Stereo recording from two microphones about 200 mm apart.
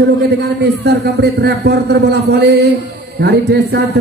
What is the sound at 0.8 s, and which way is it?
A man's voice, 55° right (ahead or behind).